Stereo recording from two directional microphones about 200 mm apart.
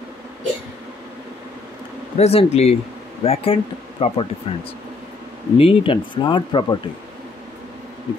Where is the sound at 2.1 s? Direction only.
30° left (ahead or behind).